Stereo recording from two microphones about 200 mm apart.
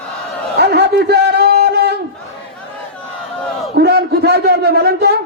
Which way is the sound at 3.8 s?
55° right (ahead or behind).